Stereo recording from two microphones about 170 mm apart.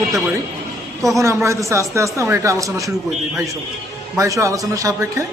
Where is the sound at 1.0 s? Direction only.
20° right (ahead or behind).